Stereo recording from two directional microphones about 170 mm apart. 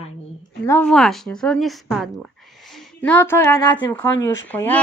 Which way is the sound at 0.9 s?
Centre (ahead or behind).